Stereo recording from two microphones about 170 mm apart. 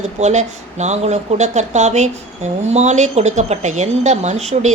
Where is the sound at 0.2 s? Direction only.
40° right (ahead or behind).